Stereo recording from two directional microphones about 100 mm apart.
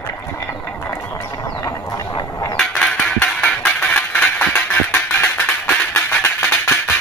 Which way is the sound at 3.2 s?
15° left (ahead or behind).